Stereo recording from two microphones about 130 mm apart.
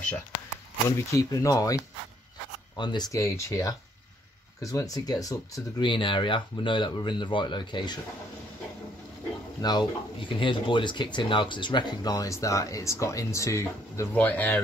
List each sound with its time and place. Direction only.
0.8 s speech: 25° left (ahead or behind)
5.9 s speech: 40° left (ahead or behind)
9.6 s speech: 35° left (ahead or behind); by 14.6 s 15° left (ahead or behind)